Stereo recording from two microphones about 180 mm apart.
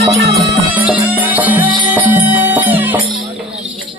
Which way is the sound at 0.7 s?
10° right (ahead or behind).